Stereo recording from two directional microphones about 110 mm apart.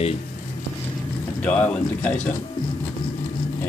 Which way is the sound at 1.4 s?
10° left (ahead or behind).